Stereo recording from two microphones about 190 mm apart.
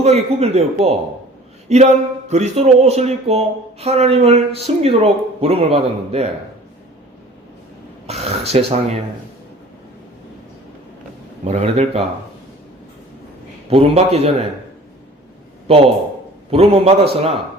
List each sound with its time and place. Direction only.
0.0 s speech: 35° right (ahead or behind)
8.0 s speech: 35° right (ahead or behind)
11.4 s speech: 35° right (ahead or behind)
13.7 s speech: 30° right (ahead or behind)
16.5 s speech: 30° right (ahead or behind)